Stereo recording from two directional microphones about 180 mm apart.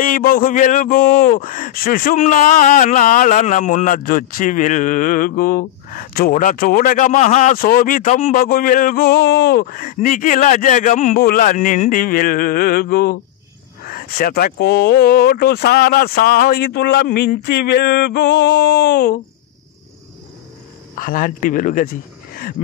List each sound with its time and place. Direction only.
0.0 s speech: 50° left (ahead or behind)
20.9 s speech: 50° left (ahead or behind)